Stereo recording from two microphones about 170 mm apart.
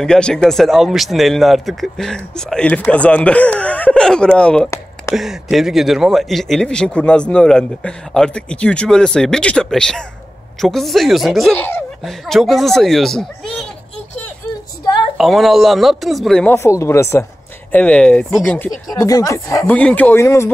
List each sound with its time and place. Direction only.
0.0 s speech: 5° left (ahead or behind)
15.1 s speech: centre (ahead or behind)
16.5 s speech: 15° left (ahead or behind)
18.9 s speech: 20° left (ahead or behind)